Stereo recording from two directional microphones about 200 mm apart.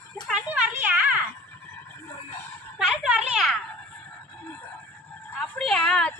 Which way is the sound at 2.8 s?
5° right (ahead or behind).